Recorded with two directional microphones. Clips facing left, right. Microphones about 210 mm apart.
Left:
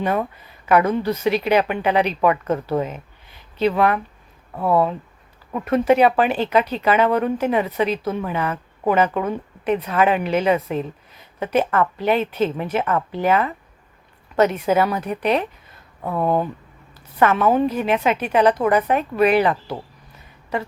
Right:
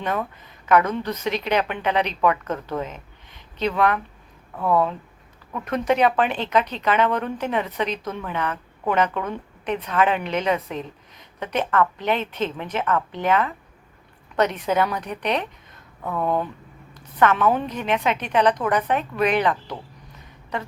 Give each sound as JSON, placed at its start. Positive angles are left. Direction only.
{"t": 0.7, "sound": "a woman's voice", "side_deg": 10}
{"t": 4.5, "sound": "speech", "side_deg": 25}
{"t": 5.6, "sound": "a woman's voice", "side_deg": 5}
{"t": 16.0, "sound": "speech", "side_deg": 30}
{"t": 17.2, "sound": "a woman's voice", "side_deg": 10}